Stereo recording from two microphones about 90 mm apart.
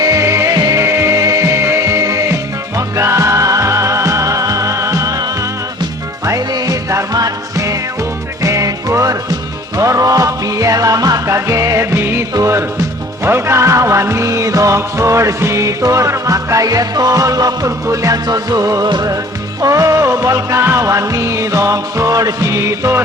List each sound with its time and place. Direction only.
0.0 s music: 35° right (ahead or behind)
0.8 s music: 30° right (ahead or behind)
6.2 s music: 40° right (ahead or behind)